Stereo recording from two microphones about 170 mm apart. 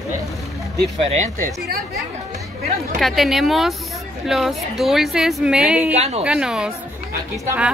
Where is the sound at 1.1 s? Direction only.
45° right (ahead or behind).